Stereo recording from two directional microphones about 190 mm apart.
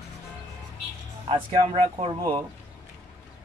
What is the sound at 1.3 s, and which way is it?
Speech, 30° right (ahead or behind).